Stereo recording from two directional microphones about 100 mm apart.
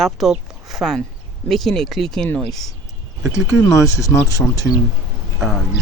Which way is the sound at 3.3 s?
30° left (ahead or behind).